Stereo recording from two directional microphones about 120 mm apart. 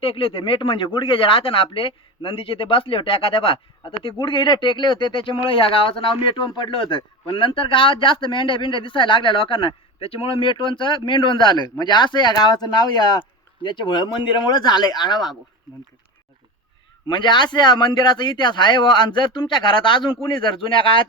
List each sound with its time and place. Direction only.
0.0 s speech: 50° left (ahead or behind)
17.1 s speech: 40° left (ahead or behind)